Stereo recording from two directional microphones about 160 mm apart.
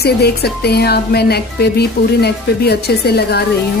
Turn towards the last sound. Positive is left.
turn(degrees=85)